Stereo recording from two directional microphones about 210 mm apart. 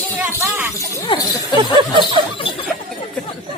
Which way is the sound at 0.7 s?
15° left (ahead or behind).